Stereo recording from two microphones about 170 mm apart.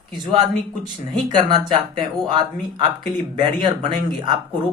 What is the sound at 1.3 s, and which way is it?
Speech, 25° right (ahead or behind).